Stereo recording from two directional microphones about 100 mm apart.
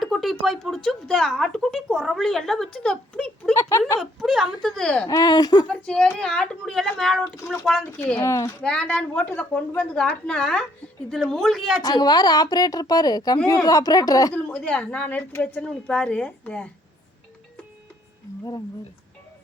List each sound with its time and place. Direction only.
0.0 s speech: centre (ahead or behind)
3.5 s a woman's voice: 30° left (ahead or behind)
4.0 s speech: 5° right (ahead or behind)
5.0 s speech: 40° left (ahead or behind)
5.6 s a woman's voice: 10° left (ahead or behind); by 7.7 s 5° right (ahead or behind)
7.9 s a woman's voice: 20° left (ahead or behind)
8.6 s a woman's voice: 10° left (ahead or behind)
11.8 s a woman's voice: 45° left (ahead or behind)
14.3 s a woman's voice: 10° left (ahead or behind)